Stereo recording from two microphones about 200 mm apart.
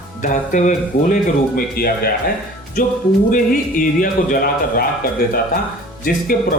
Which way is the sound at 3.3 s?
45° left (ahead or behind).